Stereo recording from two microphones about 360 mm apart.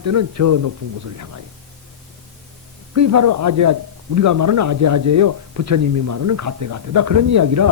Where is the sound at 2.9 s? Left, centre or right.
Right.